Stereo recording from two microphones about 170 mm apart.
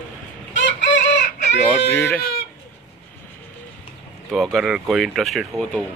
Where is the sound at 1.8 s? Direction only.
80° left.